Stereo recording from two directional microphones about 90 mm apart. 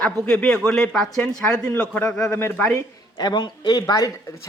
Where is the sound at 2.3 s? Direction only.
20° left (ahead or behind).